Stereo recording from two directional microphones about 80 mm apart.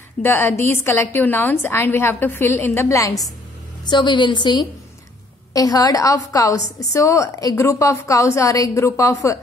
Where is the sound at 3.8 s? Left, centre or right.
Left.